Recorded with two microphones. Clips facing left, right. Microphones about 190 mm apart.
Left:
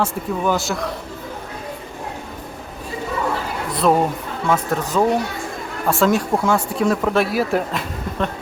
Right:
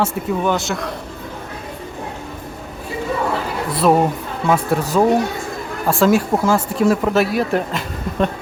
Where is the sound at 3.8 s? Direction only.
5° right (ahead or behind).